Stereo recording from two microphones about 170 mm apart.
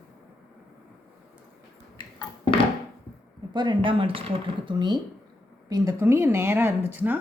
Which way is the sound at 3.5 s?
25° right (ahead or behind).